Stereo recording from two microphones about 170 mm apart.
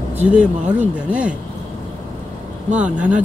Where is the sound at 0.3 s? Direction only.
10° right (ahead or behind).